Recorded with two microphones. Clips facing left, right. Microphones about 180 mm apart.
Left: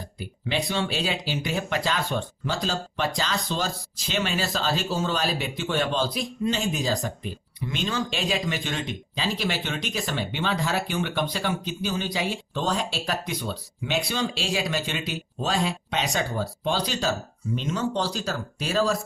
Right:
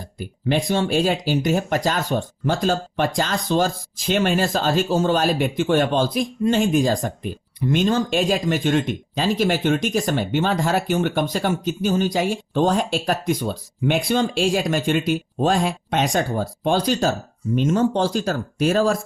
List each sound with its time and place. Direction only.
0.2 s speech: 50° right (ahead or behind)